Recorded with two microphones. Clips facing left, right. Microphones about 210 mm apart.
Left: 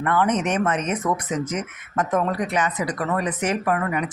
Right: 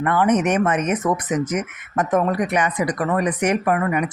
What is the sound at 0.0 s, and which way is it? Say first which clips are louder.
A woman's voice: right 3 dB; 15° right (ahead or behind).